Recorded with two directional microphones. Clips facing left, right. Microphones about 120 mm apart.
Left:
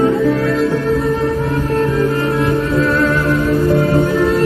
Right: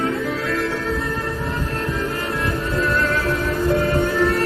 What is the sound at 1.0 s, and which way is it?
Music, 30° left (ahead or behind).